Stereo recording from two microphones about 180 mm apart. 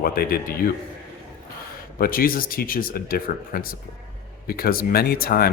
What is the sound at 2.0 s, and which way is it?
Speech, 55° left (ahead or behind).